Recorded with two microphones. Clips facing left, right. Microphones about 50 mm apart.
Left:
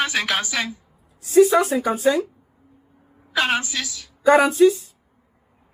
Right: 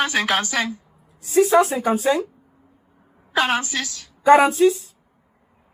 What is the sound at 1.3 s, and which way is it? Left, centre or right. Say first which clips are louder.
Speech: left 1 dB; right.